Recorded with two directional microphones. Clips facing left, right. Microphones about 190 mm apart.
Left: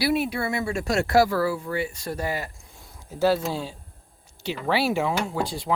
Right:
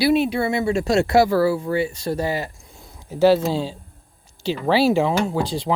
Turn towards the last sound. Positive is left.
turn(degrees=-30)  # may be behind; listen again after turning